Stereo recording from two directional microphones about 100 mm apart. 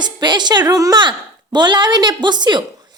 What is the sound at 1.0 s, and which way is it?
A woman's voice, 50° right (ahead or behind).